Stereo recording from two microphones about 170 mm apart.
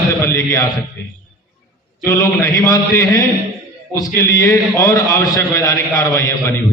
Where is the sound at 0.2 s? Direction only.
20° left (ahead or behind).